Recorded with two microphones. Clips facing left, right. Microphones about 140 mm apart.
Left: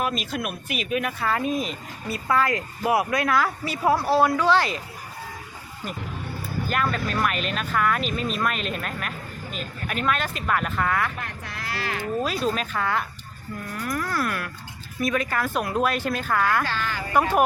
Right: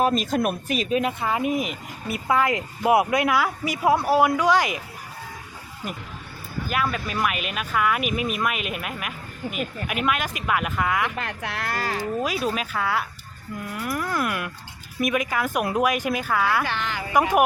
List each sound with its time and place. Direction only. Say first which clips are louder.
0.0 s speech: right 6 dB; 40° right (ahead or behind)
1.2 s speech: right 1 dB; 15° right (ahead or behind)
6.7 s speech: even; 5° right (ahead or behind)
11.2 s speech: right 5 dB; 85° right
11.7 s speech: right 1 dB; 40° right (ahead or behind)
12.2 s speech: even; 5° right (ahead or behind)